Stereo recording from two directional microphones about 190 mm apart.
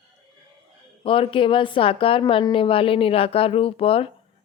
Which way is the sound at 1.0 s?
30° left (ahead or behind).